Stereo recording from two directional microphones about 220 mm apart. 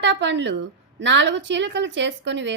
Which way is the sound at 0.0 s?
55° right (ahead or behind).